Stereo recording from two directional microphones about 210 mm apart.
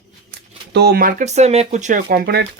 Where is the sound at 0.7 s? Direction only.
50° right (ahead or behind).